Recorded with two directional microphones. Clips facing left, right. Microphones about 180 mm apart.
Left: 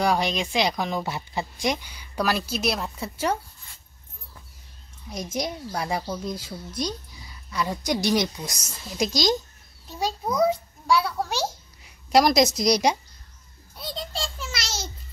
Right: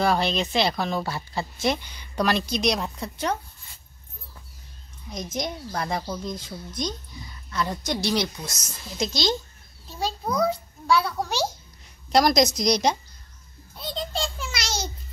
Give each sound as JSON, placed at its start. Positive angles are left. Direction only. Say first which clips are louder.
{"t": 0.0, "sound": "speech", "louder": "right 1 dB", "side_deg": 10}
{"t": 5.1, "sound": "a child's voice", "louder": "left 1 dB", "side_deg": 10}
{"t": 11.0, "sound": "speech", "louder": "right 1 dB", "side_deg": 5}
{"t": 13.7, "sound": "a sound", "louder": "right 3 dB", "side_deg": 5}